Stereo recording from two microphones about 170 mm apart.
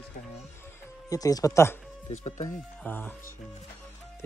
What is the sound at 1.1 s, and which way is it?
Speech, 20° left (ahead or behind).